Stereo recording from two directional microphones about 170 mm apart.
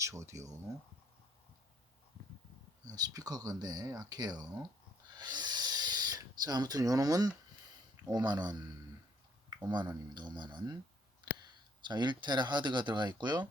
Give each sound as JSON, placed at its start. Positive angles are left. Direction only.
{"t": 0.0, "sound": "speech", "side_deg": -15}
{"t": 2.8, "sound": "speech", "side_deg": -20}
{"t": 5.1, "sound": "owl", "side_deg": -25}
{"t": 8.0, "sound": "speech", "side_deg": -25}
{"t": 11.9, "sound": "speech", "side_deg": -25}